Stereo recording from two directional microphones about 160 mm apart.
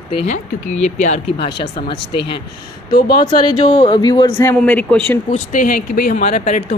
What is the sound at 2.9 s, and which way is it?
Speech, 75° left (ahead or behind).